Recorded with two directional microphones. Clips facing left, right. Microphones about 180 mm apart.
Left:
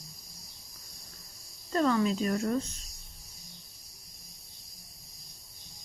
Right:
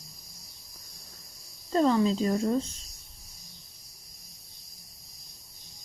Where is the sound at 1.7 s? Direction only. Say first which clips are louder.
Right 3 dB; 25° right (ahead or behind).